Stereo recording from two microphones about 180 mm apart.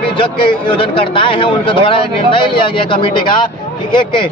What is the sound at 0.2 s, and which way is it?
A man's voice, 30° left (ahead or behind).